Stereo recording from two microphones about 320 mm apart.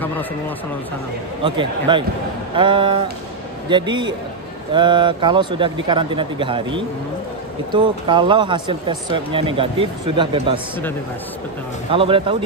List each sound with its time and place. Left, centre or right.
1.4 s speech: centre
11.9 s speech: centre